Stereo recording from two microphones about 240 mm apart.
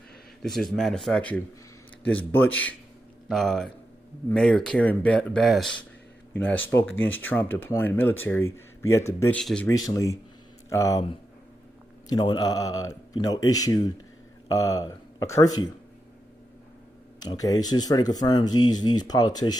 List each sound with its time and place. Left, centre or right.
0.4 s speech: centre
9.6 s speech: centre
12.0 s speech: centre
17.2 s speech: centre